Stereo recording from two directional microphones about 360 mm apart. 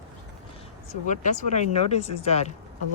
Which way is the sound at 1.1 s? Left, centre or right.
Centre.